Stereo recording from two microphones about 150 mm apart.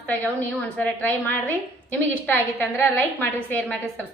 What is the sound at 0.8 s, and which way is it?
A woman's voice, 10° left (ahead or behind).